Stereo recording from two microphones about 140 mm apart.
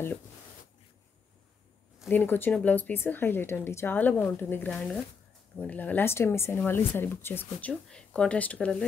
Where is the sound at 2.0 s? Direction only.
15° left (ahead or behind).